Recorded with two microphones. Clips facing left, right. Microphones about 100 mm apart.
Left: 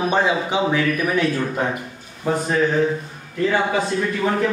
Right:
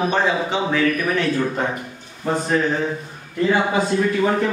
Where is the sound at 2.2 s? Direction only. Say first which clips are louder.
Left 1 dB; 10° left (ahead or behind).